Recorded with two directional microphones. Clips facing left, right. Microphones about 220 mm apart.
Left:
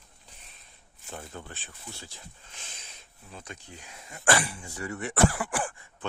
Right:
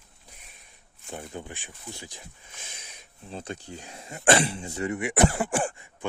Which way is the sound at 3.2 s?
30° right (ahead or behind).